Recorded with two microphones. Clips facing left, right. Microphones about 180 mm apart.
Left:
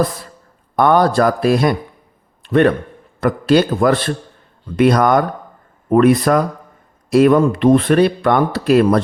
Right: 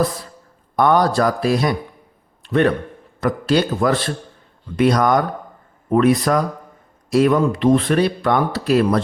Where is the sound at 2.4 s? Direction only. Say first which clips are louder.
Left 4 dB; 55° left (ahead or behind).